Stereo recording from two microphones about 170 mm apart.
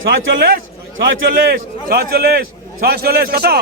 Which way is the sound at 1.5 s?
65° right (ahead or behind).